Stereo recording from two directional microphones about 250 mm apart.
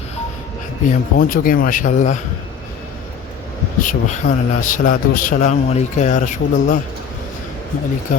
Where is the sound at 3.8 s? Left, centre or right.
Left.